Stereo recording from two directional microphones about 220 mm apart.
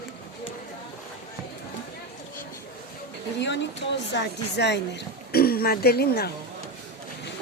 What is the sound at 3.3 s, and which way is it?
Speech, 55° left (ahead or behind).